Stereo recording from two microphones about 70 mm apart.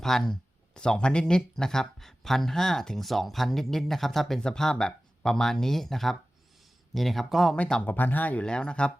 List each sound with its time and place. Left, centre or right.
0.0 s speech: centre
7.5 s speech: centre